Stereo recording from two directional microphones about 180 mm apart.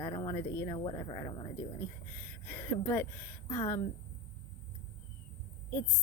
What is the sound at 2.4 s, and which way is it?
A woman's voice, 10° left (ahead or behind).